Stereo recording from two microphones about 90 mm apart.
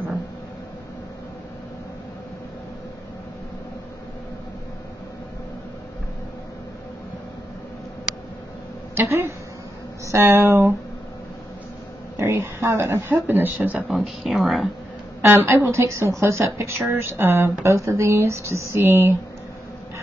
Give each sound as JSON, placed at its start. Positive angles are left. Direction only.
{"t": 10.0, "sound": "speech", "side_deg": -25}
{"t": 12.2, "sound": "speech", "side_deg": -30}
{"t": 13.8, "sound": "speech", "side_deg": -5}
{"t": 15.2, "sound": "a woman's voice", "side_deg": -25}